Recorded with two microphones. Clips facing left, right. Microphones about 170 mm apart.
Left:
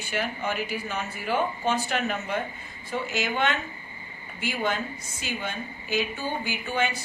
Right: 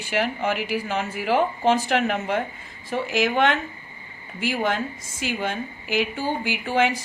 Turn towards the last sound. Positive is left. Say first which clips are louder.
# right 6 dB
turn(degrees=-90)